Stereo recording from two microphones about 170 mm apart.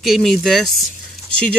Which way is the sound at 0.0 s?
Centre (ahead or behind).